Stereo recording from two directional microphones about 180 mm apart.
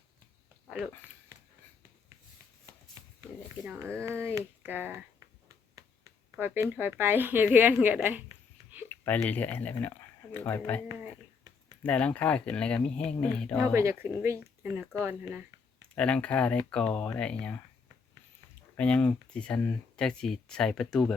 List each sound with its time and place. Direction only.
3.8 s speech: 15° right (ahead or behind)
6.3 s speech: 10° right (ahead or behind)
8.9 s speech: 10° left (ahead or behind)
10.8 s a sound: 20° right (ahead or behind)
11.8 s speech: 5° left (ahead or behind)
13.7 s speech: 15° right (ahead or behind)
16.0 s speech: 5° left (ahead or behind)
18.8 s speech: 5° left (ahead or behind)